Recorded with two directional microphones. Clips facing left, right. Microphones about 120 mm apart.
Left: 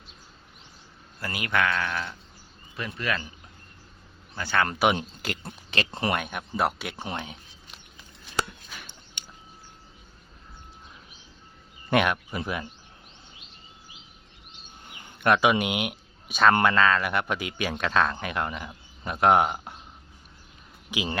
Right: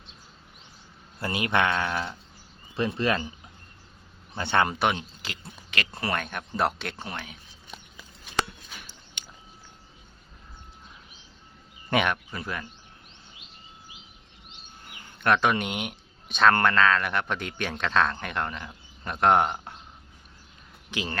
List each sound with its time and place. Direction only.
1.2 s speech: 25° right (ahead or behind)
4.4 s speech: 25° right (ahead or behind)
4.9 s speech: 50° left (ahead or behind)
5.7 s speech: 25° left (ahead or behind)
6.1 s speech: 10° left (ahead or behind)
7.0 s speech: 20° left (ahead or behind)
11.9 s speech: 5° left (ahead or behind)
12.3 s speech: 15° left (ahead or behind)
14.8 s a sound: 20° left (ahead or behind)
15.2 s speech: 5° left (ahead or behind)
20.9 s speech: 15° left (ahead or behind)